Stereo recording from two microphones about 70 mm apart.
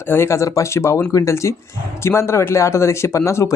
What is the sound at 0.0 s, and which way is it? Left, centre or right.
Speech, left.